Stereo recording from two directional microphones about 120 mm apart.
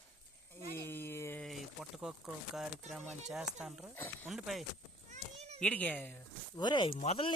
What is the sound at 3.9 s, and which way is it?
Speech, 15° left (ahead or behind).